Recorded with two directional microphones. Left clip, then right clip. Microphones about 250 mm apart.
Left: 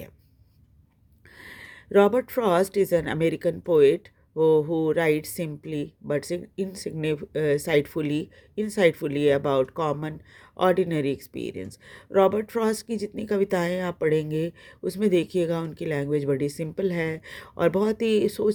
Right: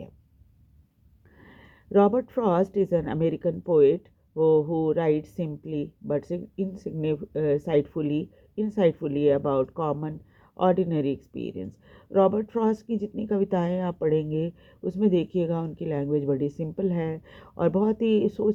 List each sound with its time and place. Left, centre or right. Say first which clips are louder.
1.4 s speech: left 10 dB; left